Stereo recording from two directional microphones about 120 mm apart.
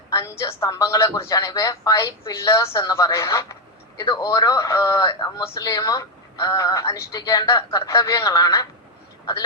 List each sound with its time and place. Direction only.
0.1 s a woman's voice: 25° left (ahead or behind)